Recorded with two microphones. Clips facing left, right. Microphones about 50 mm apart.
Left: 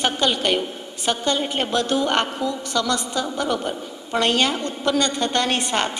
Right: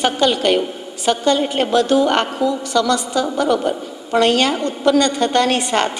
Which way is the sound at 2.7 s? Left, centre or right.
Right.